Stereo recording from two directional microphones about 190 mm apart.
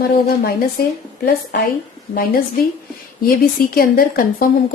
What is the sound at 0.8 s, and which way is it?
Speech, 50° left (ahead or behind).